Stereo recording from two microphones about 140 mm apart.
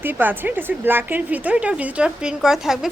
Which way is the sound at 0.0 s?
15° right (ahead or behind).